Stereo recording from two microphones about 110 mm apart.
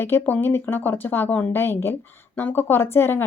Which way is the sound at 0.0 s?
20° left (ahead or behind).